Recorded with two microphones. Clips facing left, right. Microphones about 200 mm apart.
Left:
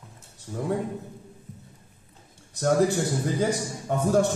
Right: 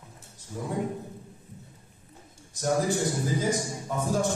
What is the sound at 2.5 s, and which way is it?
A man's voice, 65° left (ahead or behind).